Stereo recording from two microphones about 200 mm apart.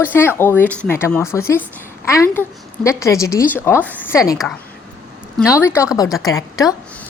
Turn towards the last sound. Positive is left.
turn(degrees=15)  # may be behind; listen again after turning